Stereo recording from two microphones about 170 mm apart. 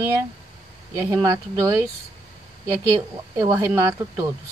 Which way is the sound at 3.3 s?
20° right (ahead or behind).